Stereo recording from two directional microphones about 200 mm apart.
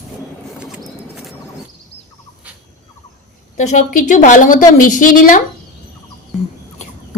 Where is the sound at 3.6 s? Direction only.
40° left (ahead or behind).